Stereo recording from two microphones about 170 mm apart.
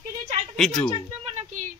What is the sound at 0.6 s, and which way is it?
Speech, 5° left (ahead or behind).